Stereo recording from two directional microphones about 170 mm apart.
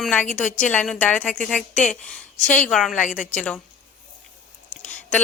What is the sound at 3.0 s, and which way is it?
Speech, 45° left (ahead or behind).